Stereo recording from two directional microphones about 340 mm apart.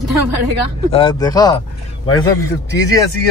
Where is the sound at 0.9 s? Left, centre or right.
Centre.